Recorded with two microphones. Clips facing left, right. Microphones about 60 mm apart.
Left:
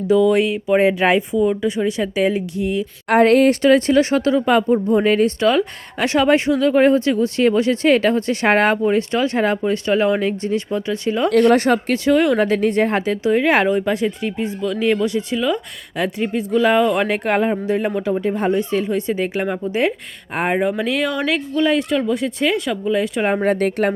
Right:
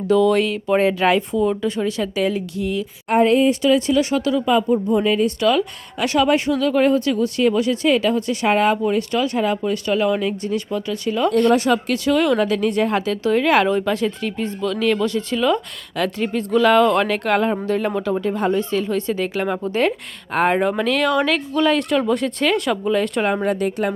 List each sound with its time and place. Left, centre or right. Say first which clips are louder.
0.1 s speech: left 1 dB; centre
3.1 s speech: left 3 dB; left
3.6 s speech: left 3 dB; left
8.9 s speech: left 2 dB; left
11.5 s speech: left 2 dB; left
12.0 s speech: left 2 dB; left
15.4 s speech: right 3 dB; centre
16.0 s speech: left 1 dB; centre
19.5 s speech: even; centre
20.6 s speech: even; centre
23.4 s speech: left 3 dB; left